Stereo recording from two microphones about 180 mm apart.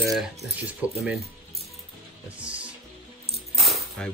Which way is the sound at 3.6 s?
Centre (ahead or behind).